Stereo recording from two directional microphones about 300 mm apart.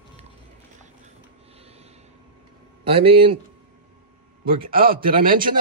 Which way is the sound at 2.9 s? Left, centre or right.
Centre.